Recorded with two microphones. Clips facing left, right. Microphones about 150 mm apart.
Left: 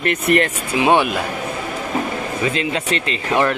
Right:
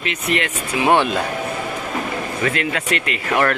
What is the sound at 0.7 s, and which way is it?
Speech, 15° left (ahead or behind).